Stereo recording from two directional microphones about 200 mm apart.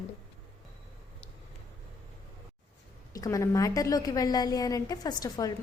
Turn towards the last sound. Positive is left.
turn(degrees=20)  # may be behind; listen again after turning